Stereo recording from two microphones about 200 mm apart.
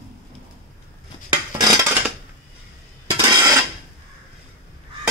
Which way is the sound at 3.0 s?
20° right (ahead or behind).